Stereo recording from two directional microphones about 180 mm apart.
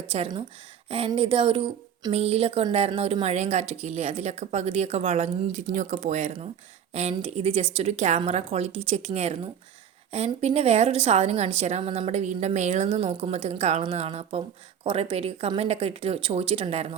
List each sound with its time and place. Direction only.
0.1 s speech: 35° right (ahead or behind)